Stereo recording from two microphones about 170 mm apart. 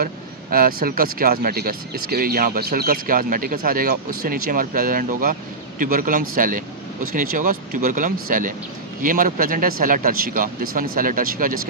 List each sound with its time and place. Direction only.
0.0 s speech: 60° right (ahead or behind)